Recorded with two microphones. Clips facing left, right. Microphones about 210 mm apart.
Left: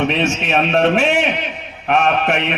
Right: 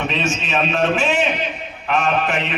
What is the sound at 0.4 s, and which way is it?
A man's voice, 60° left (ahead or behind).